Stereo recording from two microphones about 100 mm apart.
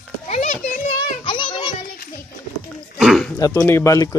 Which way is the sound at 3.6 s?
25° left (ahead or behind).